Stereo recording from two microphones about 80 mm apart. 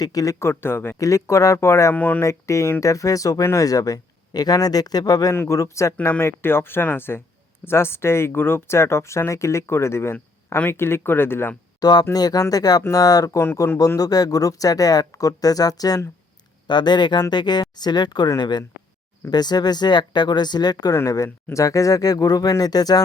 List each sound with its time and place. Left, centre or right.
0.0 s speech: left
0.9 s speech: left
1.9 s speech: left
2.2 s speech: left
5.3 s speech: left
6.0 s speech: left
11.8 s speech: left
16.6 s speech: left
20.9 s speech: left